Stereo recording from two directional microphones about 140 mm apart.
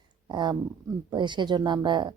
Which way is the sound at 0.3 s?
30° right (ahead or behind).